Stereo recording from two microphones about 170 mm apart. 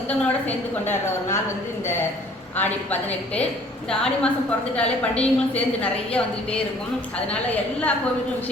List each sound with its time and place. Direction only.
0.1 s a woman's voice: 10° left (ahead or behind)
2.6 s a woman's voice: 10° left (ahead or behind)